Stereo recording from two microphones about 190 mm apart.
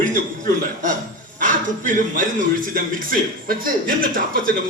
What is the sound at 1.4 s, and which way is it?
A man's voice, 45° right (ahead or behind).